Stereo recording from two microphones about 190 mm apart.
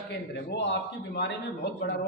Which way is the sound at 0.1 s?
65° left (ahead or behind).